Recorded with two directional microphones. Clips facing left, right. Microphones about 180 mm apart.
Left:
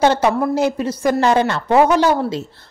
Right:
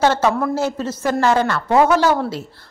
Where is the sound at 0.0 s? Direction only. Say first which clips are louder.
Left 2 dB; 15° left (ahead or behind).